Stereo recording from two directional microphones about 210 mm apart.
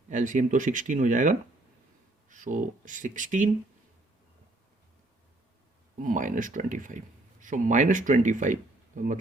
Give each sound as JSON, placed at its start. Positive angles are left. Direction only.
{"t": 0.1, "sound": "speech", "side_deg": -35}
{"t": 6.0, "sound": "speech", "side_deg": -40}